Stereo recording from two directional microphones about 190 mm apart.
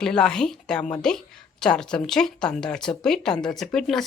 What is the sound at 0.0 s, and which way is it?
A woman's voice, 5° left (ahead or behind).